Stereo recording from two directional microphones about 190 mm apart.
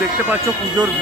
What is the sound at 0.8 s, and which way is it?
Speech, 20° right (ahead or behind).